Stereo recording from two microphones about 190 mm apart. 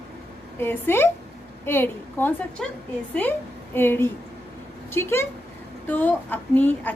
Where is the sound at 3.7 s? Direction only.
10° left (ahead or behind).